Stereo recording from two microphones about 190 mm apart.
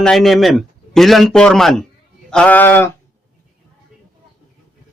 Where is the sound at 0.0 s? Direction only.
Centre (ahead or behind).